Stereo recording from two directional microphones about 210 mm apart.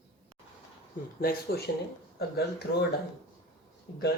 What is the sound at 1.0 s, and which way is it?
Speech, 40° left (ahead or behind).